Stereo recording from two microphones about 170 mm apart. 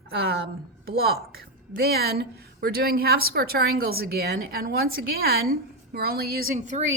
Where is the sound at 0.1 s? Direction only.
65° right (ahead or behind).